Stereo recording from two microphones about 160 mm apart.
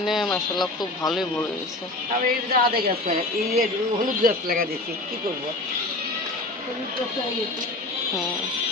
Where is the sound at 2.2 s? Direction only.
70° right (ahead or behind).